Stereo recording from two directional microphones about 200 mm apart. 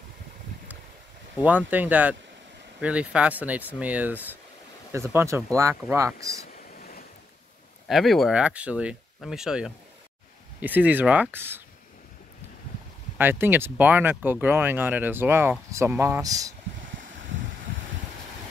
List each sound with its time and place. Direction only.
1.7 s speech: 10° right (ahead or behind)
6.8 s waves: 50° left (ahead or behind)
7.9 s speech: centre (ahead or behind)
13.2 s speech: 10° right (ahead or behind)